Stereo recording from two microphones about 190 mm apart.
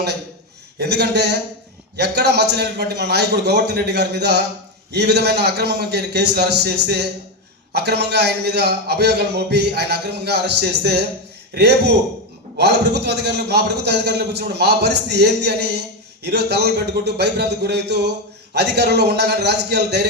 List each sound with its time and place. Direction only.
0.8 s a man's voice: 60° right (ahead or behind)